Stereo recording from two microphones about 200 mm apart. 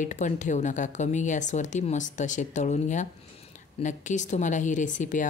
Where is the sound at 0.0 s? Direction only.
40° left (ahead or behind).